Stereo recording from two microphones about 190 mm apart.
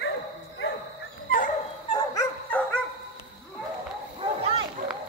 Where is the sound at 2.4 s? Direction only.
5° left (ahead or behind).